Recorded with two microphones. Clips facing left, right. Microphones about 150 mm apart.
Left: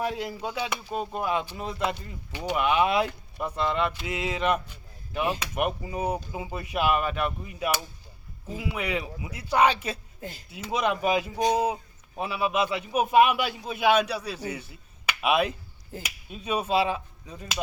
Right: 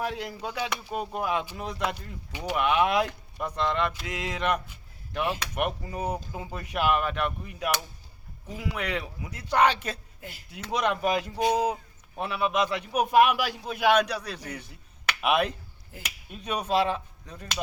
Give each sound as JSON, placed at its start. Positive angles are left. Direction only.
{"t": 0.0, "sound": "a man's voice", "side_deg": 0}